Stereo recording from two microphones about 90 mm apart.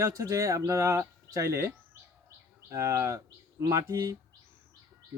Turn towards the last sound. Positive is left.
turn(degrees=-35)  # may be behind; listen again after turning